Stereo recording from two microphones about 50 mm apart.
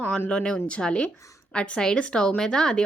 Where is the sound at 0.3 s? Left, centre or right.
Left.